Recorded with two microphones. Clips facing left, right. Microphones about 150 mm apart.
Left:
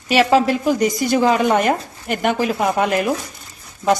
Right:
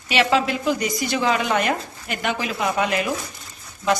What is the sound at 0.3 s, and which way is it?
Speech, 45° left (ahead or behind).